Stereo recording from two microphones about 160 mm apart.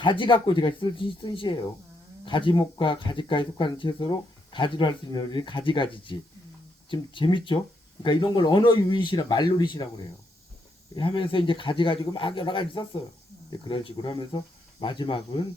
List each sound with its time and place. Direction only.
0.0 s speech: 30° left (ahead or behind)
10.9 s speech: 30° left (ahead or behind)